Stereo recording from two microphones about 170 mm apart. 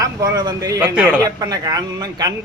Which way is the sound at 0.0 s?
20° right (ahead or behind).